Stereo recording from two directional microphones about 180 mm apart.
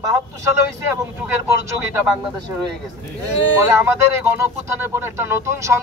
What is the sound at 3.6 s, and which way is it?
A man's voice, 15° right (ahead or behind).